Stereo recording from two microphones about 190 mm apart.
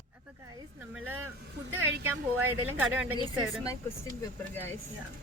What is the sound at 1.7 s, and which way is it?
Speech, 90° right.